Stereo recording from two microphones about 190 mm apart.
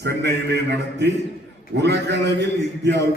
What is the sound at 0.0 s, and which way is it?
A man's voice, 60° right (ahead or behind).